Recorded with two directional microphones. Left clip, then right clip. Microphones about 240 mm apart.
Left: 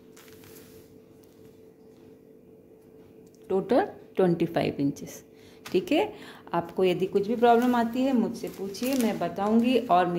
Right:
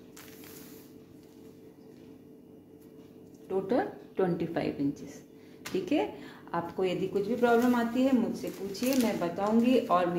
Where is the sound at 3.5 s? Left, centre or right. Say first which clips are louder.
Left 5 dB; left.